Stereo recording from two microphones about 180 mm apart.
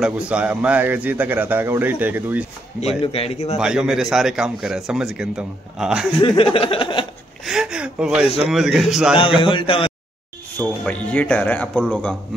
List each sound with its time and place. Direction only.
0.0 s a man's voice: 5° right (ahead or behind)
3.0 s a man's voice: 30° left (ahead or behind)
3.5 s speech: 5° right (ahead or behind)
6.2 s a sound: 30° left (ahead or behind)
7.4 s gasp: 5° right (ahead or behind)
8.4 s speech: centre (ahead or behind)
9.4 s a sound: 30° left (ahead or behind)
10.6 s speech: 5° left (ahead or behind)